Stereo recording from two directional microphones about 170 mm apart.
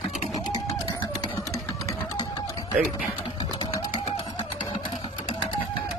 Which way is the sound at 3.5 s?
25° left (ahead or behind).